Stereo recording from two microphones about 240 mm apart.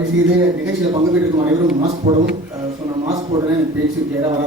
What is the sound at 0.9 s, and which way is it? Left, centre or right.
A man's voice, centre.